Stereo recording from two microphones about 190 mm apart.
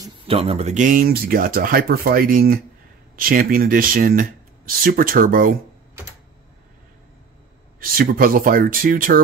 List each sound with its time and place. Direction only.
0.3 s speech: 30° right (ahead or behind); by 5.6 s 45° right (ahead or behind)
7.8 s speech: 50° right (ahead or behind)